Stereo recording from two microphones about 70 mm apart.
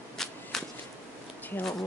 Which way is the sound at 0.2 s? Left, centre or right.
Centre.